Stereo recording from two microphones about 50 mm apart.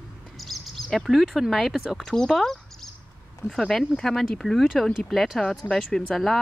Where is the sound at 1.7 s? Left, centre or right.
Centre.